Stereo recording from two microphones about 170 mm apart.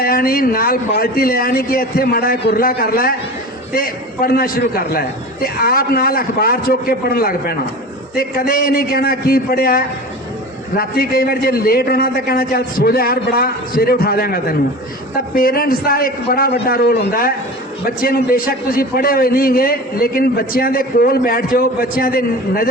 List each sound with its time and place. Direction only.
0.0 s a man's voice: 60° left (ahead or behind)